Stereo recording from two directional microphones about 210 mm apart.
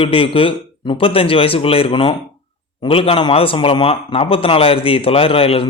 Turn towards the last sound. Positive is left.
turn(degrees=25)  # may be behind; listen again after turning